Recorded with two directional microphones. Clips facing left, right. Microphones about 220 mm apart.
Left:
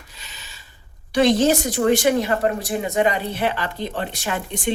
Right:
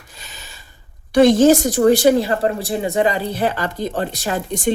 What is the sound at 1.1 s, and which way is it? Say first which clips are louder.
A woman's voice: right 6 dB; 50° right (ahead or behind).